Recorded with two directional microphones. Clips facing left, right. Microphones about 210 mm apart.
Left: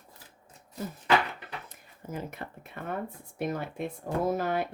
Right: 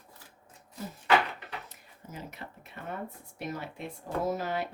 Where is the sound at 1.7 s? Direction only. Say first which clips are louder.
Left 7 dB; 50° left (ahead or behind).